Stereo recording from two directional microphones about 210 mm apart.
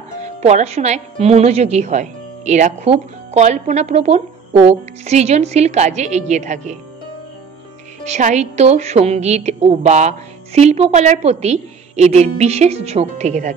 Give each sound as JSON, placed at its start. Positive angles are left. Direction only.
{"t": 0.4, "sound": "a woman's voice", "side_deg": -30}
{"t": 8.0, "sound": "a woman's voice", "side_deg": -35}